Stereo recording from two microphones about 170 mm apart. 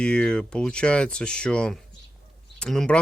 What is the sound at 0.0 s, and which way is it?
Speech, 5° left (ahead or behind).